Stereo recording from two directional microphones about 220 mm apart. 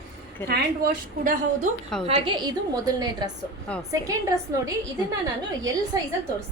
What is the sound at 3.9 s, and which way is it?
Speech, 15° right (ahead or behind).